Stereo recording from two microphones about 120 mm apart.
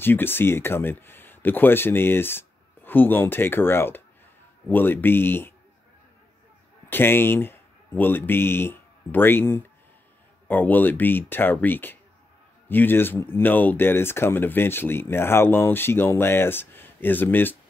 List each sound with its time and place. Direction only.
0.0 s speech: 20° left (ahead or behind)
6.9 s speech: 20° left (ahead or behind)